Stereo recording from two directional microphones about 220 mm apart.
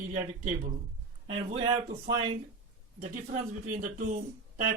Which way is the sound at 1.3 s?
25° right (ahead or behind).